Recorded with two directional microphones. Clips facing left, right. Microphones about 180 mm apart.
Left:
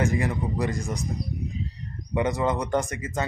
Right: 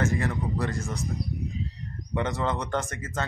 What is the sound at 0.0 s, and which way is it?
Speech, 15° left (ahead or behind).